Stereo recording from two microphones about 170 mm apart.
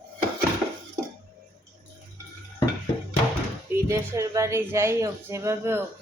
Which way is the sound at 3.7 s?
15° right (ahead or behind).